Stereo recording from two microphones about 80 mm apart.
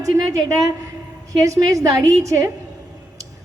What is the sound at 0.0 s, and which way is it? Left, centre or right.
A woman's voice, right.